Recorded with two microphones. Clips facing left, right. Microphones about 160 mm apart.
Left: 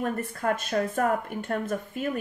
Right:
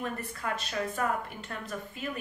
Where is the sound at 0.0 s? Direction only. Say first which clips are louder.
Left 7 dB; 50° left (ahead or behind).